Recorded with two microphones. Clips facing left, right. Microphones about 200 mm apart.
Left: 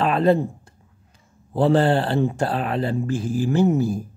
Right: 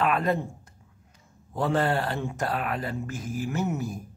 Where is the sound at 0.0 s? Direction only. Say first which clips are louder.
Left 7 dB; 30° left (ahead or behind).